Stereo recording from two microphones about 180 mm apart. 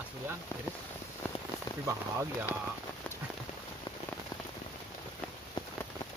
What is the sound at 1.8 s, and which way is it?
Speech, 15° right (ahead or behind).